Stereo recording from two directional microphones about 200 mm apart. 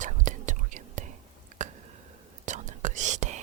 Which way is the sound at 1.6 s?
35° right (ahead or behind).